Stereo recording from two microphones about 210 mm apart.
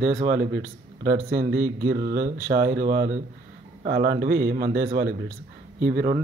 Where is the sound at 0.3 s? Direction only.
45° right (ahead or behind).